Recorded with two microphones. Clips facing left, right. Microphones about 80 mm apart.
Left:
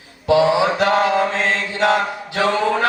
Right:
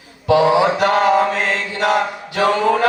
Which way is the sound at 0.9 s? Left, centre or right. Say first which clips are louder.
Right 5 dB; right.